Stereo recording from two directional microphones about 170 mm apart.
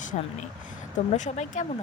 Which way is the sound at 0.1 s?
45° left (ahead or behind).